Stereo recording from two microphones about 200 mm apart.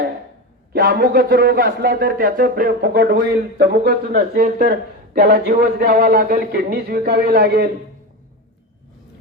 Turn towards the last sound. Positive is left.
turn(degrees=-50)  # may be behind; listen again after turning